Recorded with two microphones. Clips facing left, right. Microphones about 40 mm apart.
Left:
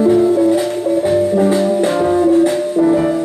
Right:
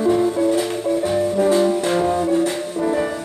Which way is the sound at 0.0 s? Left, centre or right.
Centre.